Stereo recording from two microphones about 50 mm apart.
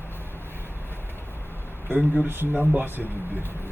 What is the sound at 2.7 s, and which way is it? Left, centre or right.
Speech, right.